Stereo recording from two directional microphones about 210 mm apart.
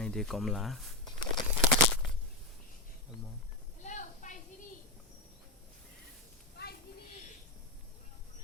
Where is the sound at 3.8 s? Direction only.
35° left (ahead or behind).